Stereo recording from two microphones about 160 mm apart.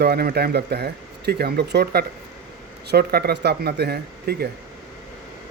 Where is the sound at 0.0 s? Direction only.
80° right.